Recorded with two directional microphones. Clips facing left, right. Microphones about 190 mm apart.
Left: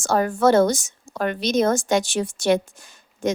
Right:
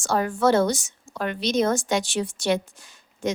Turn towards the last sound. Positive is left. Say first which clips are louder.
# left 3 dB
turn(degrees=50)  # may be behind; listen again after turning